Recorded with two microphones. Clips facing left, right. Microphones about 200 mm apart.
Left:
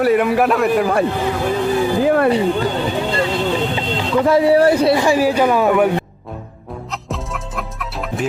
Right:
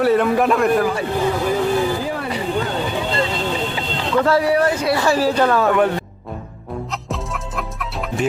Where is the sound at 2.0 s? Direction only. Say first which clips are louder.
Left 11 dB; 60° left (ahead or behind).